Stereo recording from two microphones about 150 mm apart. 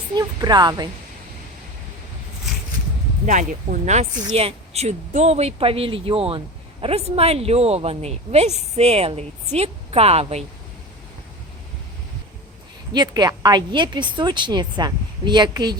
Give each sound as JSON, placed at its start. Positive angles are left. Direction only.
{"t": 0.1, "sound": "a woman's voice", "side_deg": -25}
{"t": 3.2, "sound": "speech", "side_deg": -55}
{"t": 4.4, "sound": "speech", "side_deg": -45}
{"t": 12.9, "sound": "a woman's voice", "side_deg": -30}